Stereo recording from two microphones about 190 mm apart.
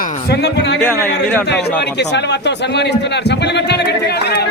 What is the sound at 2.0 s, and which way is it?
Speech, 65° left (ahead or behind).